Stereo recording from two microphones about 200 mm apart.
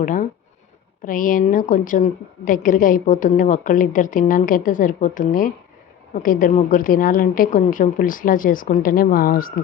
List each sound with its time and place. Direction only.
0.0 s a woman's voice: 40° left (ahead or behind)